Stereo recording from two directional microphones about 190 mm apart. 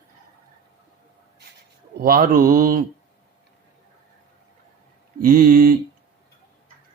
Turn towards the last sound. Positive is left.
turn(degrees=-45)  # may be behind; listen again after turning